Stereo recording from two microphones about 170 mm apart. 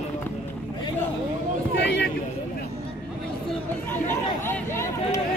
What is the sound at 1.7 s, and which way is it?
Speech, 85° left.